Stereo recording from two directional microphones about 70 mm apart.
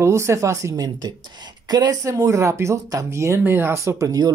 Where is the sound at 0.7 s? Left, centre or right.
Right.